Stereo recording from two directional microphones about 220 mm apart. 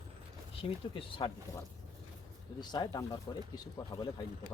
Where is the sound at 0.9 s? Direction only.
25° left (ahead or behind).